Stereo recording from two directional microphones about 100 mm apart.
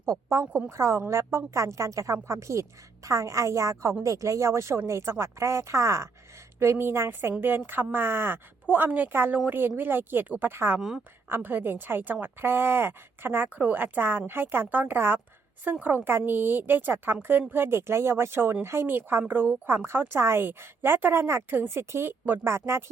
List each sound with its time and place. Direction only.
0.0 s a woman's voice: 30° right (ahead or behind)
10.8 s a woman's voice: 5° right (ahead or behind)
11.3 s a woman's voice: 20° right (ahead or behind)